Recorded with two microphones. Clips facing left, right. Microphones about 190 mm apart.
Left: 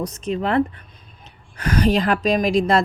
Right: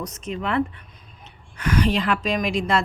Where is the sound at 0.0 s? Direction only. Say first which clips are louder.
Left 5 dB; 35° left (ahead or behind).